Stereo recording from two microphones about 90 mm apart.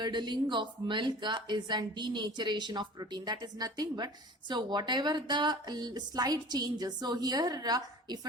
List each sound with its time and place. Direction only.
0.0 s speech: 55° right (ahead or behind)